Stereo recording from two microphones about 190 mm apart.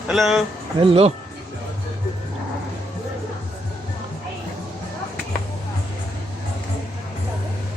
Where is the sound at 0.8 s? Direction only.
30° right (ahead or behind).